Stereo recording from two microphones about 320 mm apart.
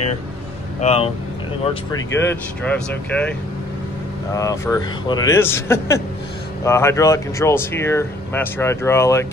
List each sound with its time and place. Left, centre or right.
0.7 s speech: centre